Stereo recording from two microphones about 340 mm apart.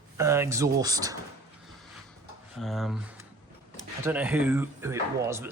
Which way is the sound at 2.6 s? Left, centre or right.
Centre.